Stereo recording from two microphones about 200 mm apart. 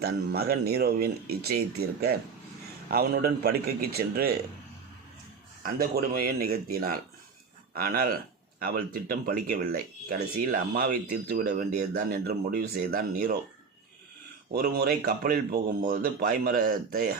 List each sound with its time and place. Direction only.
0.0 s speech: 50° right (ahead or behind)
5.6 s speech: 45° right (ahead or behind)
14.5 s speech: 50° right (ahead or behind)